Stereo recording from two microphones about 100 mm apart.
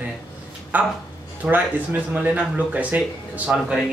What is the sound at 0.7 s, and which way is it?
Speech, 15° right (ahead or behind).